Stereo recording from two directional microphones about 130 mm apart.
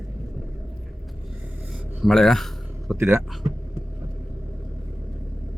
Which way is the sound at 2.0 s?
5° left (ahead or behind).